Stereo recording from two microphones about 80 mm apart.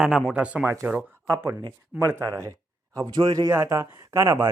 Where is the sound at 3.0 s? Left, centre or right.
Right.